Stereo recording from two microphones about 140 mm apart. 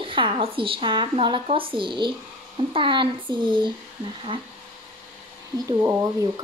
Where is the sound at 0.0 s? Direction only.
35° right (ahead or behind).